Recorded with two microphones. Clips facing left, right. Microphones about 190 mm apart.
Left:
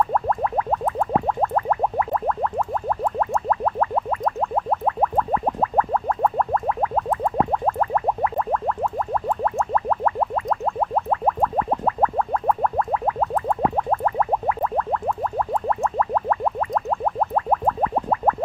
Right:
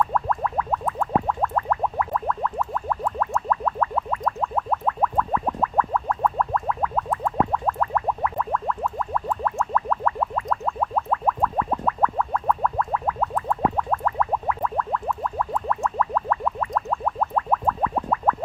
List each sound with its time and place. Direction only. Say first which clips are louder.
0.1 s music: left 3 dB; 30° left (ahead or behind)